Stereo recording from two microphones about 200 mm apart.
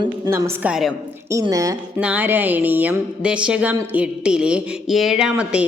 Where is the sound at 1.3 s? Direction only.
15° right (ahead or behind).